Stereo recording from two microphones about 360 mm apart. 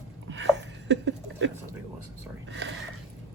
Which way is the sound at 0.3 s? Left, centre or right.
Right.